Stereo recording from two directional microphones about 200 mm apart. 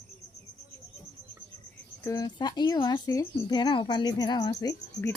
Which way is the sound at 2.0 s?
15° left (ahead or behind).